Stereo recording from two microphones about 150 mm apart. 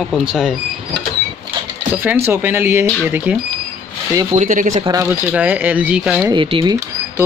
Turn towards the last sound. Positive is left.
turn(degrees=-30)  # may be behind; listen again after turning